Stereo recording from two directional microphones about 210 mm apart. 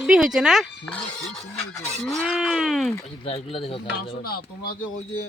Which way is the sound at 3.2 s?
30° left (ahead or behind).